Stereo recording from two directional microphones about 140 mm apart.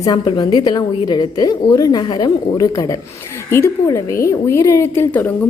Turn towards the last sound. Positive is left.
turn(degrees=10)  # may be behind; listen again after turning